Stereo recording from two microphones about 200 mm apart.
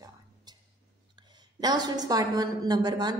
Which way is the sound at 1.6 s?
20° right (ahead or behind).